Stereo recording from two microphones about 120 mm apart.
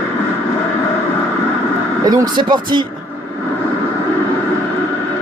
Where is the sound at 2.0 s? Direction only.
30° right (ahead or behind).